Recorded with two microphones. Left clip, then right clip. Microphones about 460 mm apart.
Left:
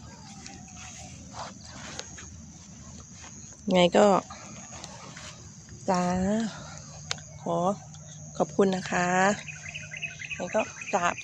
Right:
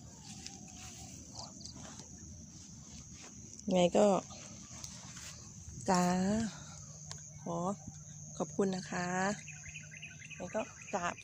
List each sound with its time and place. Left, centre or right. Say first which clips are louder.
3.7 s speech: left 8 dB; left
5.8 s speech: left 5 dB; left
9.9 s insect: left 13 dB; left
10.6 s cricket: left 10 dB; left